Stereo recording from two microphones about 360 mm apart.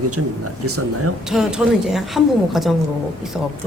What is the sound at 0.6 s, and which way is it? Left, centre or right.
Speech, right.